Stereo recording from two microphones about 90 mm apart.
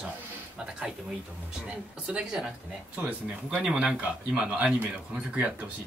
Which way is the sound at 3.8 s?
5° right (ahead or behind).